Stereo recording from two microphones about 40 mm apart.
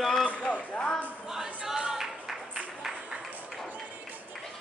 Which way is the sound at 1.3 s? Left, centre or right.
Centre.